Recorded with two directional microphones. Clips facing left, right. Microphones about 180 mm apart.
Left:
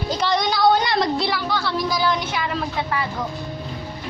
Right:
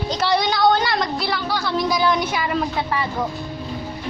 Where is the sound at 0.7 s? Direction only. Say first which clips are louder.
Left 1 dB; 20° left (ahead or behind).